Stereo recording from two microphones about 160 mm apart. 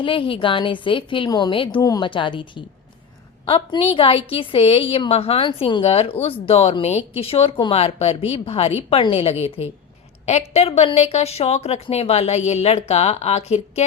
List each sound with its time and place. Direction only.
0.0 s a woman's voice: 35° left (ahead or behind)